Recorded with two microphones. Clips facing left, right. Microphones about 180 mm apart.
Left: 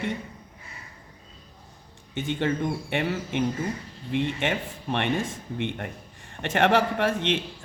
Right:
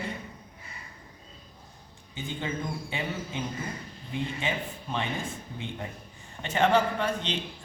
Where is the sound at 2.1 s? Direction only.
75° left (ahead or behind).